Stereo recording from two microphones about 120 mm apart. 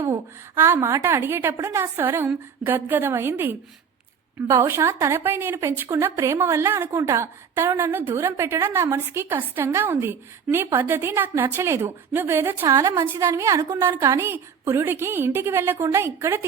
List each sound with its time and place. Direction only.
0.0 s speech: 20° right (ahead or behind)